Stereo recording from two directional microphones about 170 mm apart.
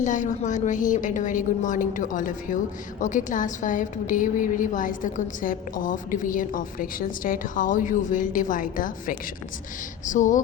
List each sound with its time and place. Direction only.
0.0 s a woman's voice: 45° left (ahead or behind)